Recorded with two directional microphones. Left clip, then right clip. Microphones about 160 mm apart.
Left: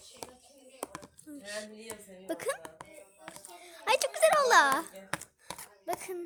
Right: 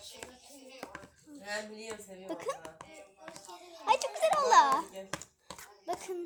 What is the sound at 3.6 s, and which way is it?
A child's voice, 45° left (ahead or behind).